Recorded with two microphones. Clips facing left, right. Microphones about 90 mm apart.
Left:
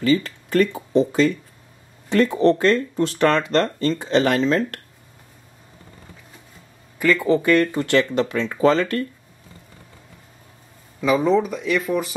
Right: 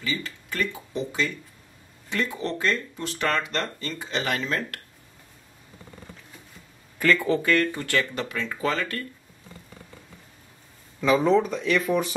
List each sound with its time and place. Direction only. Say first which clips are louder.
0.0 s speech: left 12 dB; 45° left (ahead or behind)
7.0 s speech: left 4 dB; 15° left (ahead or behind)
11.0 s speech: left 2 dB; 5° left (ahead or behind)